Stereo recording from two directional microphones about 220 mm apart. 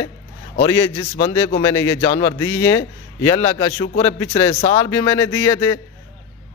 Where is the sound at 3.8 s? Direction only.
30° left (ahead or behind).